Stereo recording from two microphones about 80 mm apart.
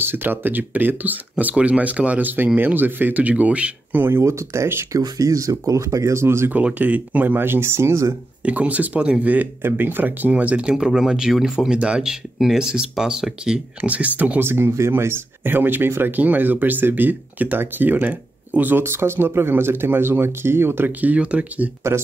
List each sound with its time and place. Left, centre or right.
0.0 s speech: right
4.0 s speech: right
4.9 s speech: right
6.5 s speech: centre; by 8.2 s right
8.5 s speech: centre
13.7 s speech: centre